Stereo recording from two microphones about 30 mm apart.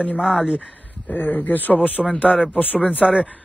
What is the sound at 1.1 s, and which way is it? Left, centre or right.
Speech, left.